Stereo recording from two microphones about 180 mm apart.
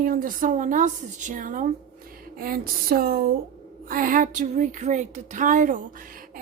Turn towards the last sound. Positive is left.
turn(degrees=-50)  # may be behind; listen again after turning